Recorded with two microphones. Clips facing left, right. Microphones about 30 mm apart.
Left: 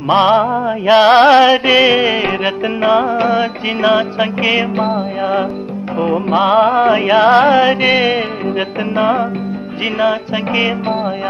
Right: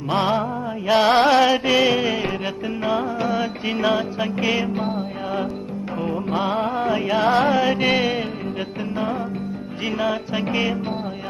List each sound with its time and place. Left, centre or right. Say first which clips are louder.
0.1 s music: left 10 dB; left
6.7 s music: left 10 dB; left
9.9 s music: left 8 dB; left